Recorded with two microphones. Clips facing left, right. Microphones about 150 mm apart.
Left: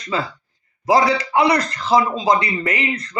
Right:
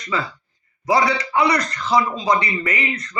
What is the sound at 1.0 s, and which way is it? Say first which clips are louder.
A man's voice: left 2 dB; 30° left (ahead or behind).